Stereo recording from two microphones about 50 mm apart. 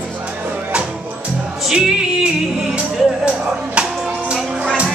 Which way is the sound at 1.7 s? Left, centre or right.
Centre.